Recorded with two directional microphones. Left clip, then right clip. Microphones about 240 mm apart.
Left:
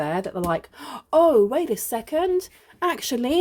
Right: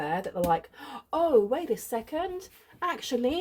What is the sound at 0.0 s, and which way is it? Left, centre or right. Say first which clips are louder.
Speech: left 4 dB; left.